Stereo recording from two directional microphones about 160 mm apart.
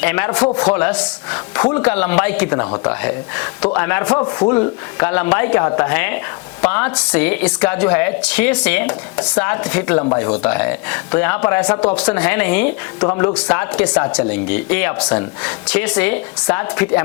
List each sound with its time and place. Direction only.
0.0 s a woman's voice: 10° left (ahead or behind)
4.1 s speech: 25° left (ahead or behind)
4.5 s a woman's voice: 15° left (ahead or behind)
13.0 s speech: 25° left (ahead or behind)
13.2 s a woman's voice: 10° left (ahead or behind)